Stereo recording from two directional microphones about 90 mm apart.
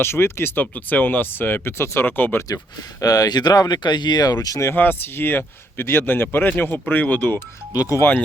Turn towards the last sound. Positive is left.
turn(degrees=40)  # may be behind; listen again after turning